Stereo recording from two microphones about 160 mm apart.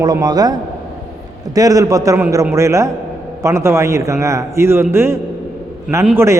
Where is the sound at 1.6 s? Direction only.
20° right (ahead or behind).